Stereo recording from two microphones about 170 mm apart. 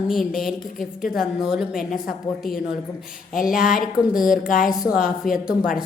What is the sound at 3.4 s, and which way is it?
Speech, 5° right (ahead or behind).